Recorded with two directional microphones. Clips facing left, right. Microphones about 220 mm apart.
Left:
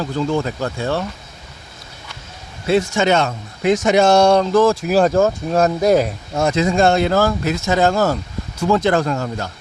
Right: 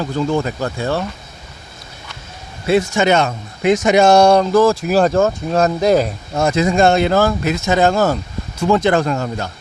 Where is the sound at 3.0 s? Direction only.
15° right (ahead or behind).